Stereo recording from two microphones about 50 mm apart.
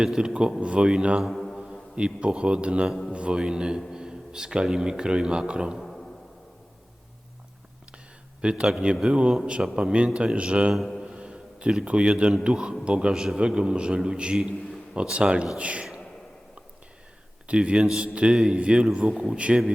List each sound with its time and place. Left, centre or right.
0.0 s a man's voice: centre
1.3 s music: centre
2.0 s a man's voice: right
5.7 s a sound: centre
8.4 s a man's voice: centre
10.8 s speech: centre
11.0 s a sound: centre
11.9 s a man's voice: right
17.4 s a man's voice: right
18.3 s a man's voice: centre
18.6 s a man's voice: right